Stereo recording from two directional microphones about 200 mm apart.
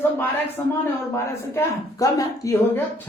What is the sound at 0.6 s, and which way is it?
Speech, 10° left (ahead or behind).